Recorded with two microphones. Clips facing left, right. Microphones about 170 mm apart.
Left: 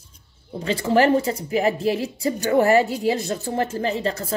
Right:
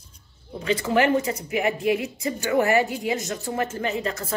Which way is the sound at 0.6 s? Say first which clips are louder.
Left 3 dB; 30° left (ahead or behind).